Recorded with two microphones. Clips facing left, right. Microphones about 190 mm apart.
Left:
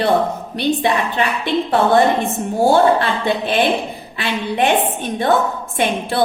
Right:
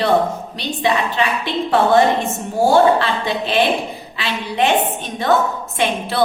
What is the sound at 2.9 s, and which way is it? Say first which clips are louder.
A woman's voice: left 1 dB; 50° left (ahead or behind).